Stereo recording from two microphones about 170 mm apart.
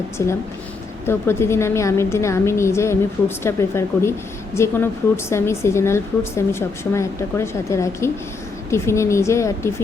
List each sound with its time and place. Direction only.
0.2 s a woman's voice: 15° left (ahead or behind)